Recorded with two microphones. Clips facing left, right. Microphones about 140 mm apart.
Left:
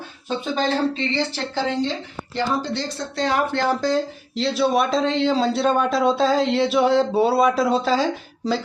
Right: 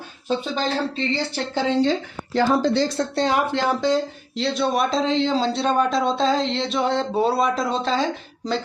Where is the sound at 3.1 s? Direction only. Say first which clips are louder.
Left 1 dB; 25° right (ahead or behind).